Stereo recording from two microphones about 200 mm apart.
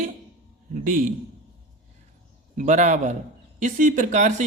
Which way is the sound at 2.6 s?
35° right (ahead or behind).